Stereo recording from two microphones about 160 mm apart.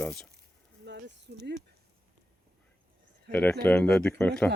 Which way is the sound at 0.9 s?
90° right.